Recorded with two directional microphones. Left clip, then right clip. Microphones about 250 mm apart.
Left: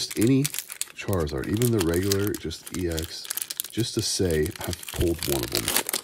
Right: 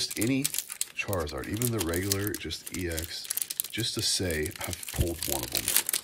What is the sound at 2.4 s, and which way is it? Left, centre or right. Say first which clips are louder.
Speech: left 4 dB; centre.